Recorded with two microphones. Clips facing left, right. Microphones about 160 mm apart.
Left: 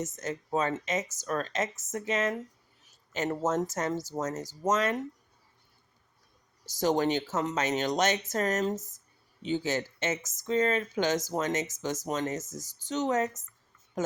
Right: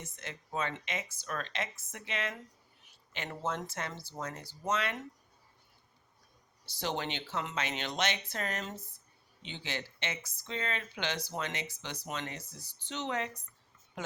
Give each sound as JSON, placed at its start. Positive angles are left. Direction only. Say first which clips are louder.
{"t": 0.0, "sound": "speech", "louder": "left 11 dB", "side_deg": 45}
{"t": 6.7, "sound": "speech", "louder": "left 10 dB", "side_deg": 45}